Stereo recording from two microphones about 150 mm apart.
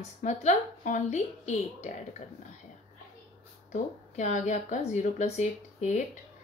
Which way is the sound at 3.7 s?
55° left (ahead or behind).